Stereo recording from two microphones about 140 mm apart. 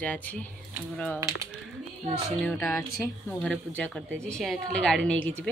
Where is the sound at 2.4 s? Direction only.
5° left (ahead or behind).